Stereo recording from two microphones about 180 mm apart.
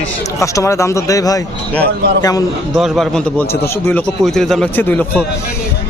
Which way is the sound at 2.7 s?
Centre (ahead or behind).